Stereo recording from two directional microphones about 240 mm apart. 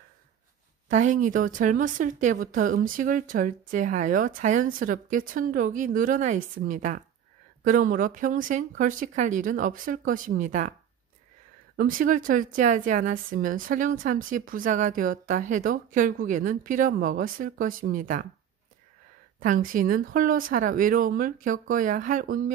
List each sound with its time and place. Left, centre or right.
0.8 s a woman's voice: right
11.7 s a woman's voice: right
19.4 s a woman's voice: right